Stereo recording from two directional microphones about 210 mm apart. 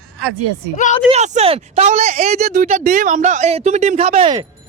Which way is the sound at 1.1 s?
30° right (ahead or behind).